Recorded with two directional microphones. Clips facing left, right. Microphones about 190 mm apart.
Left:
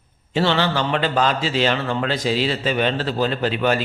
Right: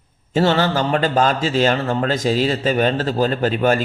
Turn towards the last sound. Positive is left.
turn(degrees=-45)  # may be behind; listen again after turning